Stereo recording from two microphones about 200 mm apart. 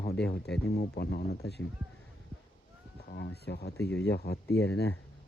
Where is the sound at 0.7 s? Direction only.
55° left (ahead or behind).